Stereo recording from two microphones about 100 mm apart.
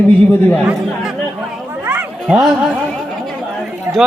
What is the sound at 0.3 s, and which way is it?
Speech, 20° left (ahead or behind).